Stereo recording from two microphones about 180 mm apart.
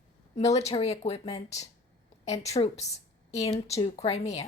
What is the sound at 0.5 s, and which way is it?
Speech, 35° left (ahead or behind).